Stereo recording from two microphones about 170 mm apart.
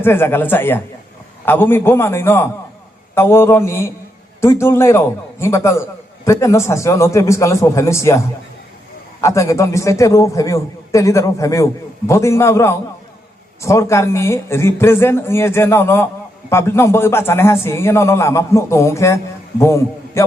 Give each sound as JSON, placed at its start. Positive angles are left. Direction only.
{"t": 0.0, "sound": "a man's voice", "side_deg": 15}
{"t": 9.2, "sound": "a man's voice", "side_deg": 15}